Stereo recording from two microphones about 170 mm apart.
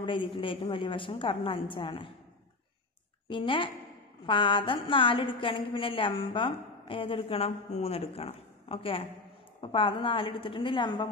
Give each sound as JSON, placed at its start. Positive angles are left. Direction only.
{"t": 0.0, "sound": "a woman's voice", "side_deg": 30}
{"t": 3.3, "sound": "a woman's voice", "side_deg": 30}